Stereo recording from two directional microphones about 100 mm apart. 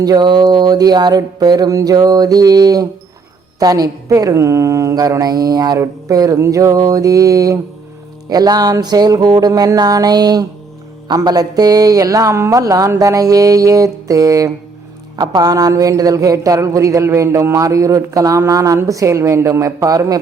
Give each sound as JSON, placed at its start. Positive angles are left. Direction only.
{"t": 0.0, "sound": "speech", "side_deg": -45}